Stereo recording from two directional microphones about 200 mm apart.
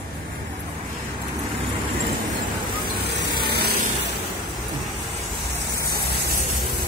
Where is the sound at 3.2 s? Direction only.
55° right (ahead or behind).